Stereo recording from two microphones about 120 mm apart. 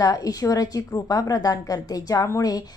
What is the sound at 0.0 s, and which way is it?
A woman's voice, 30° left (ahead or behind).